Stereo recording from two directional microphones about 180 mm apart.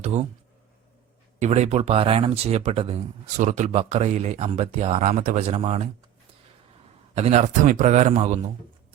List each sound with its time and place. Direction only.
0.0 s speech: 35° right (ahead or behind)
1.4 s speech: 40° right (ahead or behind)
7.2 s speech: 35° right (ahead or behind)